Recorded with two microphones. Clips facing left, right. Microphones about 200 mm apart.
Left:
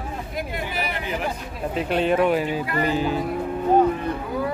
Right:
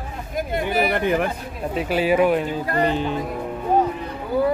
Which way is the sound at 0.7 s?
55° right (ahead or behind).